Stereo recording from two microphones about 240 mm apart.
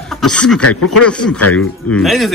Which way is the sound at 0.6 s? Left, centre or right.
Left.